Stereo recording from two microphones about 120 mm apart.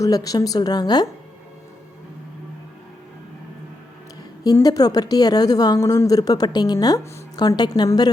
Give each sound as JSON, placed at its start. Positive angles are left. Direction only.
{"t": 0.0, "sound": "a woman's voice", "side_deg": 30}
{"t": 4.6, "sound": "a woman's voice", "side_deg": 30}